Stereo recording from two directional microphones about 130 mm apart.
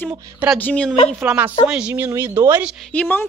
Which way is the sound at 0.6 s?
15° left (ahead or behind).